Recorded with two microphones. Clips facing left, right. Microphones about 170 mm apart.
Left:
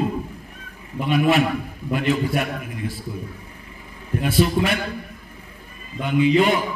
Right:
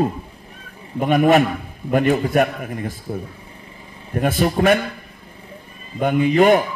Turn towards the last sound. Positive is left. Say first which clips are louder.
# right 3 dB
turn(degrees=-50)  # may be behind; listen again after turning